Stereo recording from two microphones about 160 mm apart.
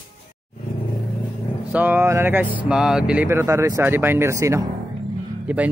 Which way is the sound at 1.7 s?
10° right (ahead or behind).